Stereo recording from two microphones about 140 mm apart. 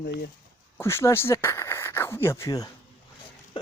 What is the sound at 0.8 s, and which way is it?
Speech, 20° left (ahead or behind).